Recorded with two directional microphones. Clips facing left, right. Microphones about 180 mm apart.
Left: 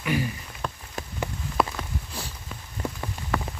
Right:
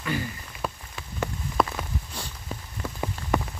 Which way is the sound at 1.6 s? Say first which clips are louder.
Even; centre (ahead or behind).